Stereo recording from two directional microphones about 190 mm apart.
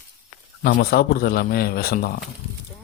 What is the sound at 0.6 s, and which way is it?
A man's voice, 55° left (ahead or behind).